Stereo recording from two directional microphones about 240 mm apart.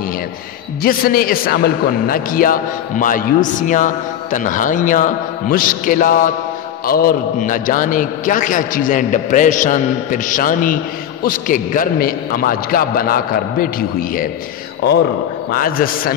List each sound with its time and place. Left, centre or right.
0.8 s a man's voice: left
15.5 s a man's voice: left